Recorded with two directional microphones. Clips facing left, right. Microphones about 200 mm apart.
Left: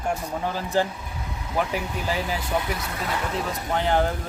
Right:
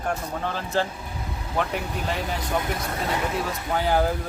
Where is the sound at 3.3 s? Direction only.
Centre (ahead or behind).